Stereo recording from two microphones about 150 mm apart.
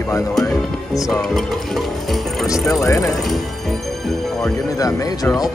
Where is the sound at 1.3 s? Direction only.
Centre (ahead or behind).